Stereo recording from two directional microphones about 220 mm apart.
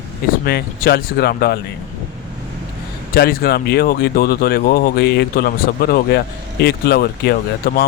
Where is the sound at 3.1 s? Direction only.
45° left (ahead or behind).